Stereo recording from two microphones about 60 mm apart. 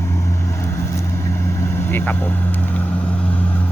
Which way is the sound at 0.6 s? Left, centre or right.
Left.